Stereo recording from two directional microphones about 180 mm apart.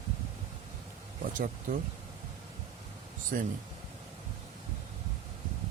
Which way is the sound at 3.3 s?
50° right (ahead or behind).